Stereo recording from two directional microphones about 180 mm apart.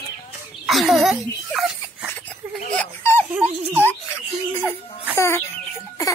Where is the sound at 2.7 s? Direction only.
10° left (ahead or behind).